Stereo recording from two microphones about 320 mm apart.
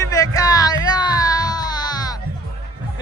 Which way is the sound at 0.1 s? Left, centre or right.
Centre.